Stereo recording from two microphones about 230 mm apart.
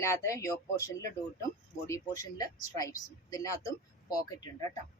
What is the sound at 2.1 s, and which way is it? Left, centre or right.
A woman's voice, centre.